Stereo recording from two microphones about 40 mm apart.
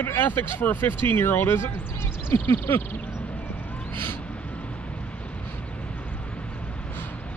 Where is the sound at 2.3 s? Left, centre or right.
Left.